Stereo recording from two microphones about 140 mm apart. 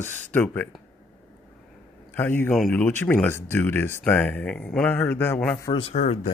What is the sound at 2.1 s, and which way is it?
A man's voice, 15° left (ahead or behind).